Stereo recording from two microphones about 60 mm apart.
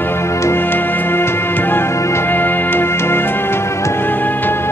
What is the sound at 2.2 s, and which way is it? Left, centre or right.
Music, left.